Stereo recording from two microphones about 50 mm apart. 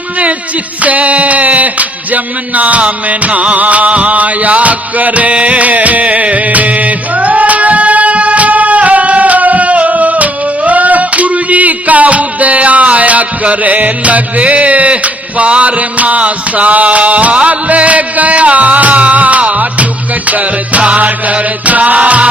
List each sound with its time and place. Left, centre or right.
0.8 s music: right